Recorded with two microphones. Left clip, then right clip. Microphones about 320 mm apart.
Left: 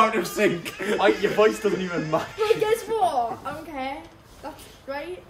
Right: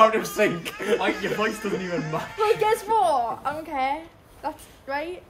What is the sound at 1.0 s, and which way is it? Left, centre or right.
Speech, centre.